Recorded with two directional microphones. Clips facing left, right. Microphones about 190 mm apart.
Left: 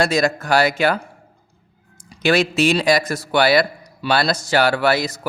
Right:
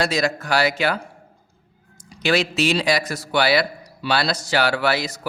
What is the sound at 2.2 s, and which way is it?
A man's voice, 50° left (ahead or behind).